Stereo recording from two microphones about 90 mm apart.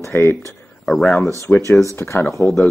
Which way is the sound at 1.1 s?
20° left (ahead or behind).